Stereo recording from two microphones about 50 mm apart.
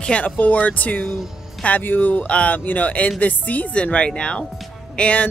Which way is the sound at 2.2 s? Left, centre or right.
Left.